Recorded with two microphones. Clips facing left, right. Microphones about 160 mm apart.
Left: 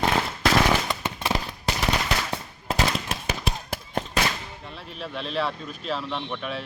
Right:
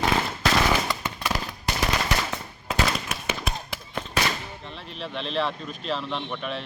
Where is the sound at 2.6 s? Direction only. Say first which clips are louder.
Left 1 dB; 35° left (ahead or behind).